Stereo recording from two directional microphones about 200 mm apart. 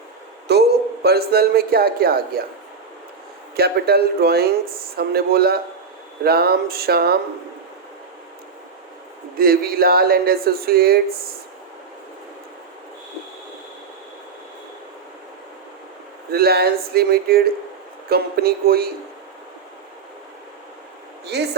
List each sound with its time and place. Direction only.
0.5 s a sound: 55° right (ahead or behind)
1.0 s speech: 50° right (ahead or behind)
3.5 s speech: 50° right (ahead or behind)
9.4 s speech: 50° right (ahead or behind)
16.3 s speech: 50° right (ahead or behind)
21.2 s speech: 55° right (ahead or behind)